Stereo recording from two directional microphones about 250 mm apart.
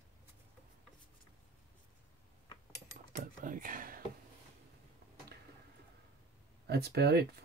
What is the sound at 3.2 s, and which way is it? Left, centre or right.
Speech, right.